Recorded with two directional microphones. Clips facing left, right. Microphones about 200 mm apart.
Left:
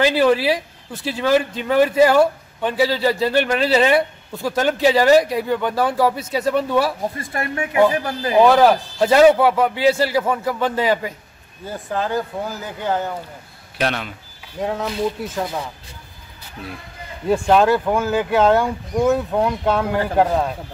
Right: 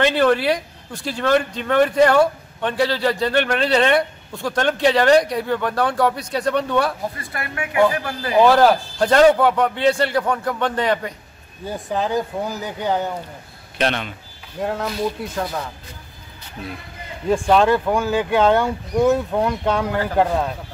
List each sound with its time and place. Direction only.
0.0 s speech: 5° left (ahead or behind)
7.2 s speech: 25° left (ahead or behind)
8.4 s speech: centre (ahead or behind)
11.6 s speech: 15° right (ahead or behind)
13.7 s speech: 5° left (ahead or behind)
17.3 s speech: 5° left (ahead or behind)